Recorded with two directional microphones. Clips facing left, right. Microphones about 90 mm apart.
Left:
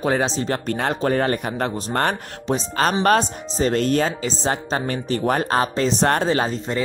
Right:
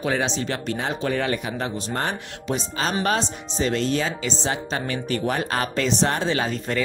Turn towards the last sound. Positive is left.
turn(degrees=40)  # may be behind; listen again after turning